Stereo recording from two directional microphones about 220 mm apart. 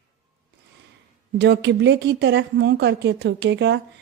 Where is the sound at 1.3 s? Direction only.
50° right (ahead or behind).